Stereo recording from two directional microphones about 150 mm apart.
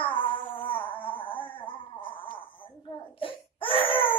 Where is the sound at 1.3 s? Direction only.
10° left (ahead or behind).